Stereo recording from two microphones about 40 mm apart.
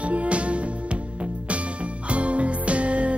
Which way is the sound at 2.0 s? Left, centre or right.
Right.